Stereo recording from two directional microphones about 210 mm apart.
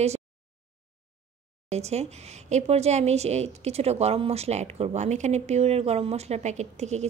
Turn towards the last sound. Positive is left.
turn(degrees=-35)  # may be behind; listen again after turning